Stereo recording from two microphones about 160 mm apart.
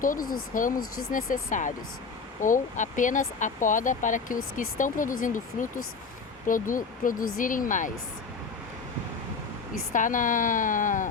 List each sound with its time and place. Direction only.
0.0 s speech: 60° left (ahead or behind)
9.9 s speech: 55° left (ahead or behind)